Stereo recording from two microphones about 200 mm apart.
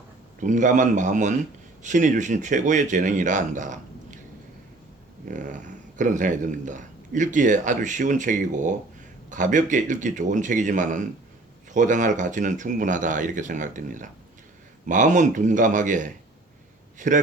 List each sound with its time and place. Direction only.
0.3 s speech: 40° right (ahead or behind)
5.3 s speech: 40° right (ahead or behind)